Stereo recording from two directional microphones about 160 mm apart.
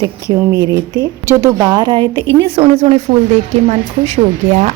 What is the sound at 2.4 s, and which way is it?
Speech, 40° right (ahead or behind).